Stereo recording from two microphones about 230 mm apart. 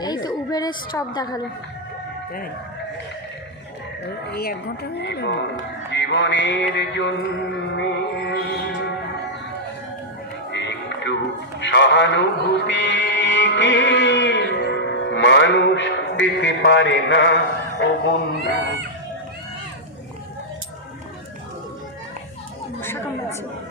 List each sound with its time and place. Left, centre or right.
0.0 s a woman's voice: centre
4.3 s speech: left
5.9 s music: left
10.5 s music: left
11.6 s speech: left
12.6 s music: left
17.7 s speech: left
22.8 s chatter: centre